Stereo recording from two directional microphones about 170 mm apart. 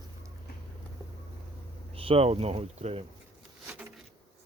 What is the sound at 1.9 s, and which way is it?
Speech, 35° right (ahead or behind).